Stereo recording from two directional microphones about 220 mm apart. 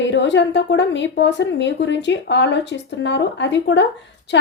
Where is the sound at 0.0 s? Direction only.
55° left (ahead or behind).